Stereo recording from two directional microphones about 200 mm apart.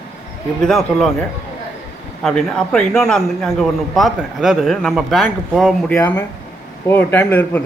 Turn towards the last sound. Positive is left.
turn(degrees=10)  # may be behind; listen again after turning